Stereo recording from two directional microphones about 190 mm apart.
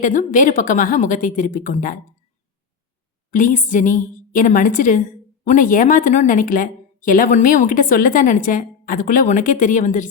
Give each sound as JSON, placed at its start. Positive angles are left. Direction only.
{"t": 0.0, "sound": "a woman's voice", "side_deg": 45}
{"t": 3.3, "sound": "a woman's voice", "side_deg": 45}